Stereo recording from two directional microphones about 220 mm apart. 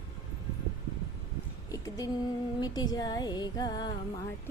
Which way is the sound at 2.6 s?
20° left (ahead or behind).